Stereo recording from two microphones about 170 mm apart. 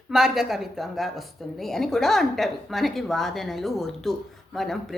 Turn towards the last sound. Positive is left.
turn(degrees=0)  # may be behind; listen again after turning